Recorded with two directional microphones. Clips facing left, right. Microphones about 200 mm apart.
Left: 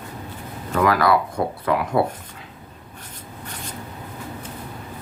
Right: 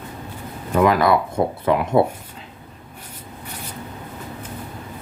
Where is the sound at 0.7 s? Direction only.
20° right (ahead or behind).